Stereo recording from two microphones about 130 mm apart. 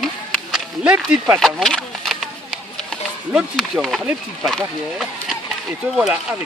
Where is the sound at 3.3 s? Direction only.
Centre (ahead or behind).